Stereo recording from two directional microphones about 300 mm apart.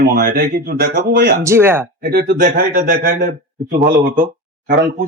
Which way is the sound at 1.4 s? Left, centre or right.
Centre.